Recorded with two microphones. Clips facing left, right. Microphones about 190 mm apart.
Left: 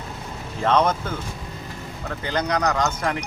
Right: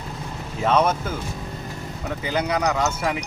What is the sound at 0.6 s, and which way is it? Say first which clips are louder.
Speech: even; 5° right (ahead or behind).